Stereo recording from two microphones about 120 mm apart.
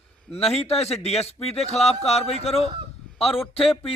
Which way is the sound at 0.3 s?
55° left (ahead or behind).